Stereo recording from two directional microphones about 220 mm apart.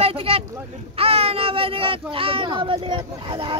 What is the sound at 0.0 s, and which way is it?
Boat, 25° right (ahead or behind).